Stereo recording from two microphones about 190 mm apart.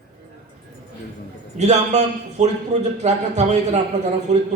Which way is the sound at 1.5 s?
35° right (ahead or behind).